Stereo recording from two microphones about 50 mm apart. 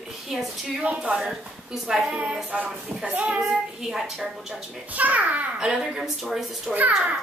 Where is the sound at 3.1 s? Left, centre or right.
Right.